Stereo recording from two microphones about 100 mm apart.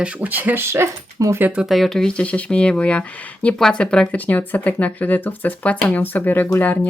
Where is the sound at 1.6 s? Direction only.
Centre (ahead or behind).